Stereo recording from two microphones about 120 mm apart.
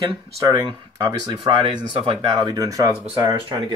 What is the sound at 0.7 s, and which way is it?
Speech, 40° right (ahead or behind).